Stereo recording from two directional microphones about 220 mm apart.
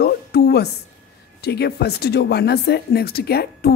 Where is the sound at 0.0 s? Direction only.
45° left (ahead or behind).